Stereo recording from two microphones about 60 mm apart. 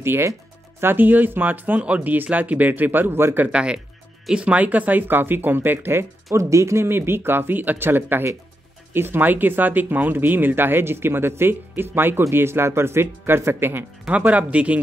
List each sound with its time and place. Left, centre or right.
0.0 s speech: right
3.4 s speech: centre; by 6.0 s right
6.3 s speech: right
14.0 s speech: right